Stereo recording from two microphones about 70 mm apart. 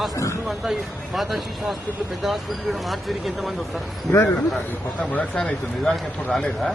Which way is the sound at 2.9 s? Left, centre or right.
Centre.